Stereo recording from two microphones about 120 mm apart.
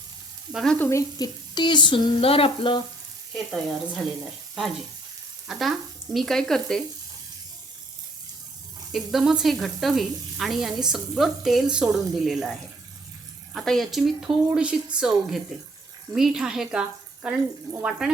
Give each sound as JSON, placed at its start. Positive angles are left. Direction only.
{"t": 0.5, "sound": "speech", "side_deg": 5}
{"t": 0.8, "sound": "speech", "side_deg": 25}
{"t": 1.2, "sound": "speech", "side_deg": 40}
{"t": 3.3, "sound": "speech", "side_deg": 0}
{"t": 5.5, "sound": "speech", "side_deg": 0}
{"t": 8.9, "sound": "speech", "side_deg": 0}
{"t": 16.1, "sound": "speech", "side_deg": -5}
{"t": 17.7, "sound": "speech", "side_deg": -30}